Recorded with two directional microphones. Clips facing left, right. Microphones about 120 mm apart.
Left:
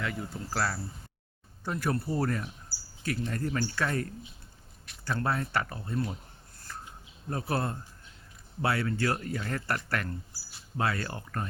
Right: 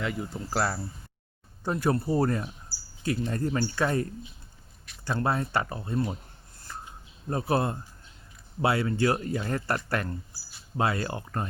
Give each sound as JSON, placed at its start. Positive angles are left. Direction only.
{"t": 0.0, "sound": "speech", "side_deg": -20}
{"t": 5.0, "sound": "speech", "side_deg": -25}
{"t": 7.3, "sound": "speech", "side_deg": -20}